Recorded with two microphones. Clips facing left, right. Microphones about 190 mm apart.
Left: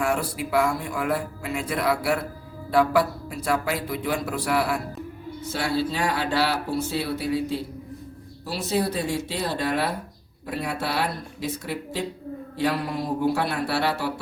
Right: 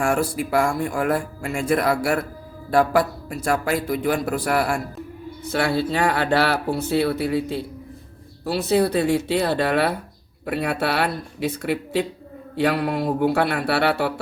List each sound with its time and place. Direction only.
0.0 s a man's voice: 50° right (ahead or behind)
5.5 s speech: 60° right (ahead or behind)